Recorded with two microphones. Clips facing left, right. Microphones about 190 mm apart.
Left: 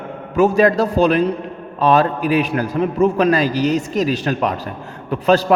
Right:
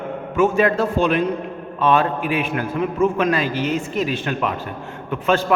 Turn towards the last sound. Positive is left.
turn(degrees=35)  # may be behind; listen again after turning